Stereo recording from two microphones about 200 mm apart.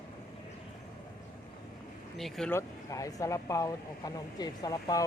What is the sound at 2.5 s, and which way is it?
Speech, 15° left (ahead or behind).